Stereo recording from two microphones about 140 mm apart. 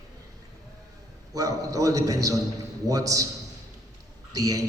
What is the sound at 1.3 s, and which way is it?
A man's voice, 25° right (ahead or behind).